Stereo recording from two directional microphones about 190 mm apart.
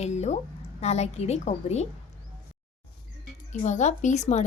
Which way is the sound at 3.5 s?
40° left (ahead or behind).